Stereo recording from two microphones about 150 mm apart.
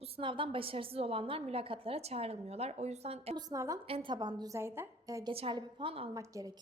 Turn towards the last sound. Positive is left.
turn(degrees=-20)  # may be behind; listen again after turning